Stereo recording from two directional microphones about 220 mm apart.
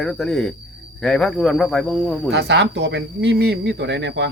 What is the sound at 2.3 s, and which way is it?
Speech, 50° right (ahead or behind).